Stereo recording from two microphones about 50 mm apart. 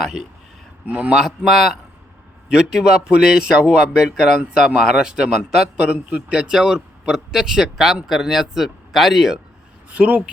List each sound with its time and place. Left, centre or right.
0.9 s a man's voice: right
1.1 s speech: centre
2.5 s a man's voice: centre
9.9 s a man's voice: right